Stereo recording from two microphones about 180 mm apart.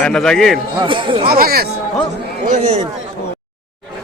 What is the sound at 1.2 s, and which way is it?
Speech, 55° right (ahead or behind).